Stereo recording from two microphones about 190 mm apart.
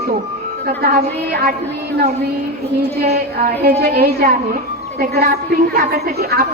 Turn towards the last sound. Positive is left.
turn(degrees=-50)  # may be behind; listen again after turning